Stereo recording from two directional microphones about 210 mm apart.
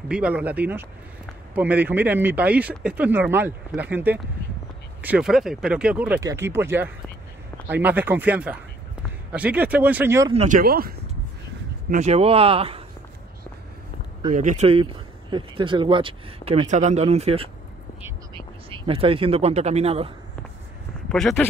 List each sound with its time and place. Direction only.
0.1 s speech: 5° right (ahead or behind)
10.3 s speech: 30° right (ahead or behind)
10.6 s speech: 45° right (ahead or behind)
11.9 s speech: 30° right (ahead or behind)
14.3 s speech: 35° right (ahead or behind)
21.1 s speech: centre (ahead or behind)